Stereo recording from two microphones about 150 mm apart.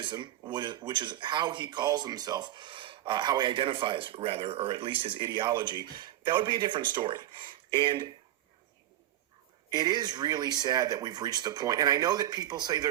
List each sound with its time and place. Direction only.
0.0 s speech: 30° right (ahead or behind)
9.7 s speech: 25° right (ahead or behind)